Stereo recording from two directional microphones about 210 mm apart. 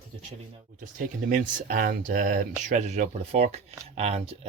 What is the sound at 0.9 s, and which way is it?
Speech, 40° right (ahead or behind).